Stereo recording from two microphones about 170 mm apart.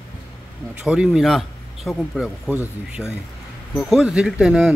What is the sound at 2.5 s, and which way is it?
Speech, 10° right (ahead or behind).